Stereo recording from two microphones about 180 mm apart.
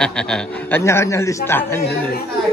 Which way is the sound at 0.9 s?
15° left (ahead or behind).